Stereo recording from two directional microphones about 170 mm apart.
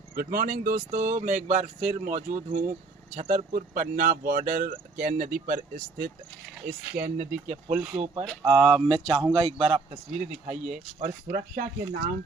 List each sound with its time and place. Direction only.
0.2 s speech: 55° right (ahead or behind)
6.9 s speech: 55° right (ahead or behind)
8.4 s speech: 25° right (ahead or behind)
10.5 s speech: 5° right (ahead or behind)
11.0 s speech: 55° right (ahead or behind)